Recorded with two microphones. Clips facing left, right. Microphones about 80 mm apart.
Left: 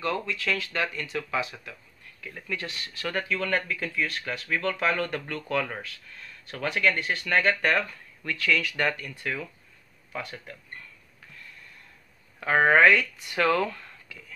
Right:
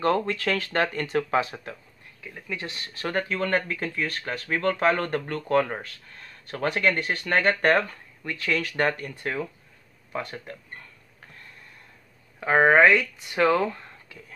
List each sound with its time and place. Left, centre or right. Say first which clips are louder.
0.0 s speech: right 6 dB; right
2.2 s speech: even; centre
2.6 s speech: right 2 dB; right
8.2 s speech: left 1 dB; right
8.5 s speech: right 1 dB; right
12.4 s speech: right 2 dB; centre